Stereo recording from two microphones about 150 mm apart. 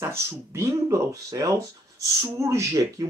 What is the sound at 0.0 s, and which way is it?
Speech, 15° right (ahead or behind).